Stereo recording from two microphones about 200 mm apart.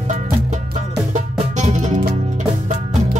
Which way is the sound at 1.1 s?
35° right (ahead or behind).